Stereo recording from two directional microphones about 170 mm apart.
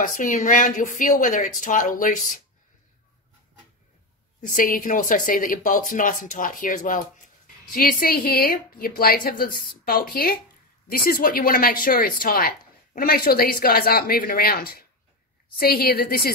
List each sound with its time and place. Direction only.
0.0 s speech: 50° left (ahead or behind)
4.6 s a woman's voice: 55° left (ahead or behind)